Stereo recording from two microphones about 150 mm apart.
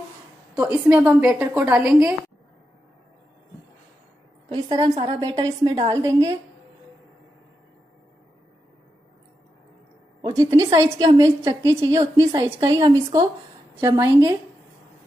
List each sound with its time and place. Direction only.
0.6 s a woman's voice: 10° right (ahead or behind)
4.5 s a woman's voice: 30° right (ahead or behind)
10.2 s a woman's voice: 25° right (ahead or behind)